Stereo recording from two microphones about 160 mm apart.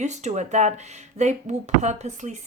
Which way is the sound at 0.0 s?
45° right (ahead or behind).